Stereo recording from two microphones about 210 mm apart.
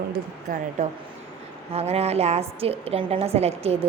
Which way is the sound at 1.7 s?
30° right (ahead or behind).